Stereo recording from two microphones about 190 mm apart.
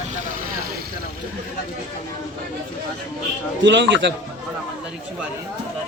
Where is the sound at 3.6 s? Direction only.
70° right (ahead or behind).